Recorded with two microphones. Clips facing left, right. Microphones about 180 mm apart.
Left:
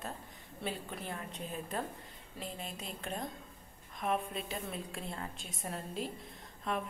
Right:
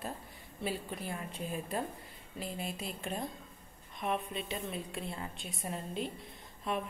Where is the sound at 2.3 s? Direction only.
5° right (ahead or behind).